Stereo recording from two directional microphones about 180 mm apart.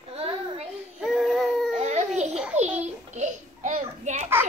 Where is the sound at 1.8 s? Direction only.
40° right (ahead or behind).